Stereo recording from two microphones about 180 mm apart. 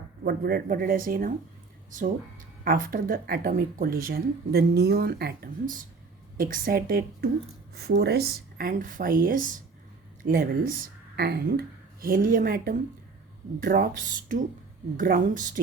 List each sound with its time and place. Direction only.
0.3 s speech: 60° right (ahead or behind)
2.6 s speech: 50° right (ahead or behind)
11.2 s speech: 60° right (ahead or behind)